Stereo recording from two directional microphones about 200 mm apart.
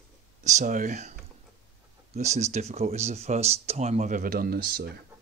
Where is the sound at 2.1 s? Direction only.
35° right (ahead or behind).